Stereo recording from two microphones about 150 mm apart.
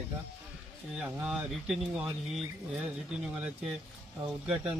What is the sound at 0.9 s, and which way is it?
A man's voice, 5° right (ahead or behind).